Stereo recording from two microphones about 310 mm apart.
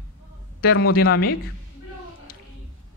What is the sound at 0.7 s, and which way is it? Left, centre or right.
Speech, left.